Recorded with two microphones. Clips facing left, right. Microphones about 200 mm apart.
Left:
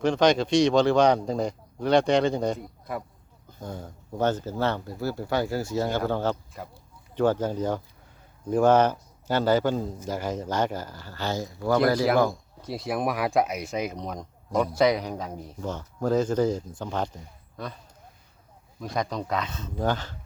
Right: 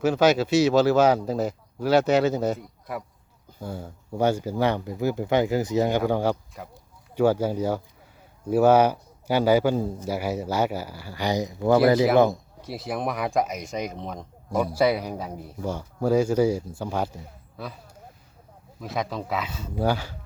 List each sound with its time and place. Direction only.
0.0 s speech: 5° right (ahead or behind)
6.5 s speech: centre (ahead or behind); by 12.4 s 20° right (ahead or behind)
12.6 s speech: centre (ahead or behind)
18.8 s speech: 5° right (ahead or behind)